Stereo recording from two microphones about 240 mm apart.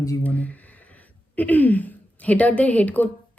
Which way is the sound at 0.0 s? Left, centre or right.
Centre.